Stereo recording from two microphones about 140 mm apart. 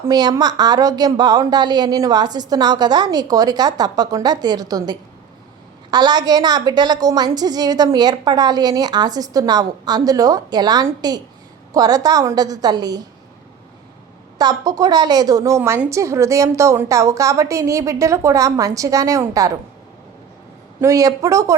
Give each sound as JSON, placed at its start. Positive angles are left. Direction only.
{"t": 0.1, "sound": "a woman's voice", "side_deg": -30}
{"t": 14.3, "sound": "a woman's voice", "side_deg": -25}
{"t": 20.8, "sound": "a woman's voice", "side_deg": -25}